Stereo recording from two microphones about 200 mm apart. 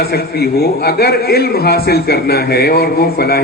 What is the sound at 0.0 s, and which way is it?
A man's voice, 50° left (ahead or behind).